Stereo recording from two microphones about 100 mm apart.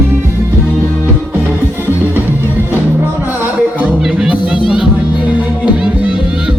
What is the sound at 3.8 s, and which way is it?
Music, 10° right (ahead or behind).